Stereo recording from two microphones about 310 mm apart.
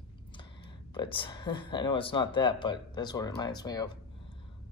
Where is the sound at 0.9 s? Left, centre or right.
Centre.